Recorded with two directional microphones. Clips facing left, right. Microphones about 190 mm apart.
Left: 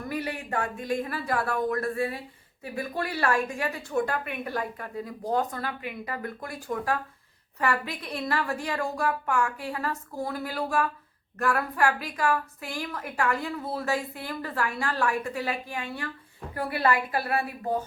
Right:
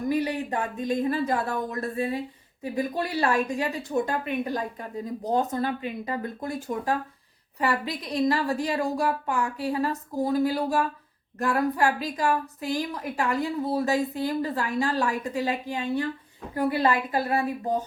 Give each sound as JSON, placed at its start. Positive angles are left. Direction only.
{"t": 0.1, "sound": "a woman's voice", "side_deg": -20}